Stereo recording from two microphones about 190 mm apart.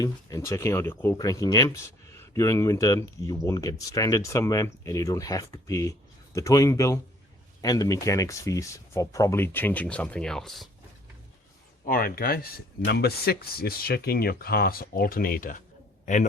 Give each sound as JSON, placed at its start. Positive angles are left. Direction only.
{"t": 0.0, "sound": "speech", "side_deg": 20}
{"t": 11.9, "sound": "speech", "side_deg": 50}